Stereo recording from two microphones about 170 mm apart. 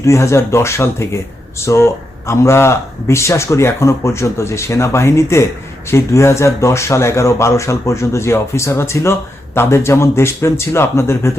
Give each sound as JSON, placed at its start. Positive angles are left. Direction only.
{"t": 0.0, "sound": "speech", "side_deg": 15}